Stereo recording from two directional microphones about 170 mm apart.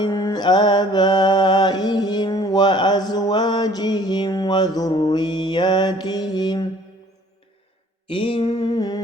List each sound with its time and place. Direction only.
0.0 s mantra: 20° left (ahead or behind)
8.1 s mantra: 30° left (ahead or behind)